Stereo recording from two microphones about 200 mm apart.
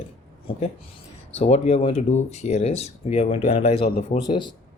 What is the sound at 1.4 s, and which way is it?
A man's voice, 30° left (ahead or behind).